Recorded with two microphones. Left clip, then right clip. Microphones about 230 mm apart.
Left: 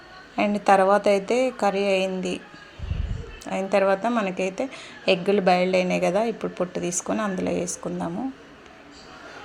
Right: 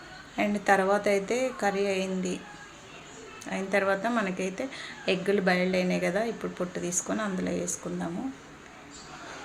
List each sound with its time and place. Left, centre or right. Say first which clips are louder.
0.3 s a woman's voice: left 6 dB; left
3.4 s a woman's voice: left 6 dB; left